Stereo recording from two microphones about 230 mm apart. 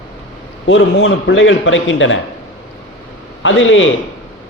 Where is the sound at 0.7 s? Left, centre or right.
Left.